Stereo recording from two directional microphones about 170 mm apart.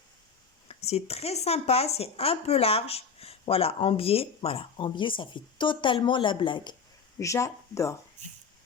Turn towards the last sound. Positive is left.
turn(degrees=15)  # may be behind; listen again after turning